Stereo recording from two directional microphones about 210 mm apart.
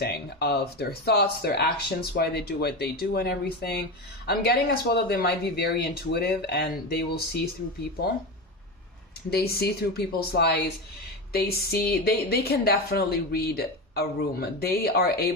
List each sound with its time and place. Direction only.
0.0 s a woman's voice: 50° left (ahead or behind)
9.3 s a woman's voice: 50° left (ahead or behind)